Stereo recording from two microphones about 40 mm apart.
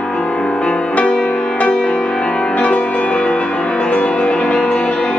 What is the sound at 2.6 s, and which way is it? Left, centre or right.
Music, left.